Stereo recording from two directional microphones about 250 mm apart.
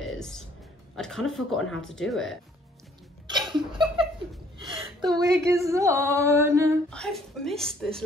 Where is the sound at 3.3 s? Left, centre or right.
Centre.